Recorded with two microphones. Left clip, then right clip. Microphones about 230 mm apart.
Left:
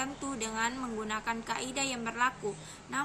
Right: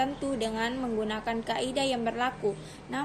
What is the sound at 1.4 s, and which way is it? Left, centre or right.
Speech, left.